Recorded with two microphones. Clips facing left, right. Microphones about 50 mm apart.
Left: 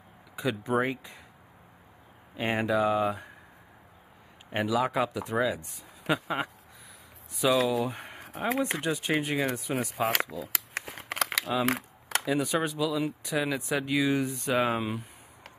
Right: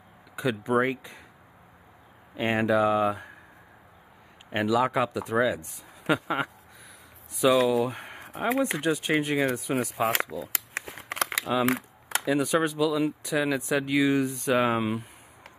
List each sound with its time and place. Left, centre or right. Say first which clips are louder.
0.7 s speech: right 3 dB; centre
2.3 s speech: right 3 dB; centre
4.8 s speech: right 2 dB; centre
11.3 s a sound: right 3 dB; centre
12.5 s speech: right 4 dB; centre
13.3 s speech: right 2 dB; centre
14.6 s speech: right 3 dB; centre